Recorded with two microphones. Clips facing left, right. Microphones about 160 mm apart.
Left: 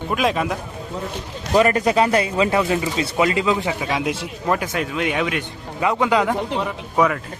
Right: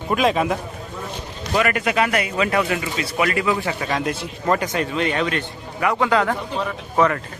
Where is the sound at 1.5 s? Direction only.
30° left (ahead or behind).